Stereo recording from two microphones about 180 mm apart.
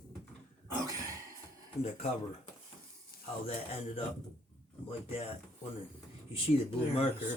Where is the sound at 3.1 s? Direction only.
55° left (ahead or behind).